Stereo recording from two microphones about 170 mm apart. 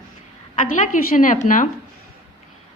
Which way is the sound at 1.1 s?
50° left (ahead or behind).